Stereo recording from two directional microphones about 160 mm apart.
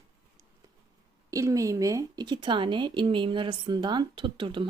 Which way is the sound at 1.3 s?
20° right (ahead or behind).